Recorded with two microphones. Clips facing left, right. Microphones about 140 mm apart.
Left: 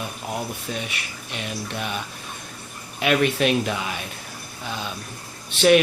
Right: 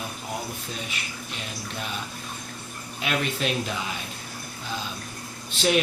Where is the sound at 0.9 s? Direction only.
70° left (ahead or behind).